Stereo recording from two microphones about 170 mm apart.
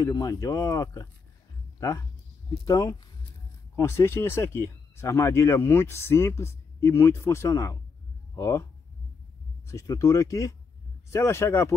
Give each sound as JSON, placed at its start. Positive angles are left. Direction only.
{"t": 0.0, "sound": "speech", "side_deg": 20}
{"t": 9.7, "sound": "speech", "side_deg": 15}